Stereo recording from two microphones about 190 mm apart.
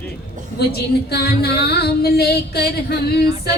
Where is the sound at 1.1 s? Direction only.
55° left (ahead or behind).